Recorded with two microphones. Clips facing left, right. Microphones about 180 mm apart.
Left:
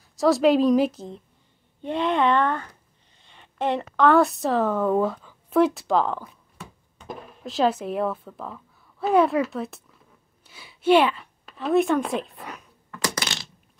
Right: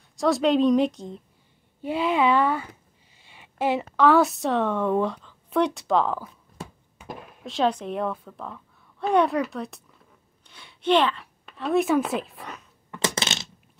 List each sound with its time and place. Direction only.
0.1 s a woman's voice: centre (ahead or behind)
12.9 s coin: 25° right (ahead or behind)